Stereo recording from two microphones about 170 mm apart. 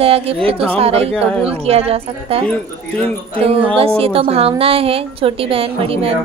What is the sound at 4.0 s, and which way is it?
A woman's voice, 35° right (ahead or behind).